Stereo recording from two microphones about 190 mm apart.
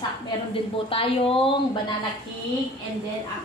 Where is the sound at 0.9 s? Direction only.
30° left (ahead or behind).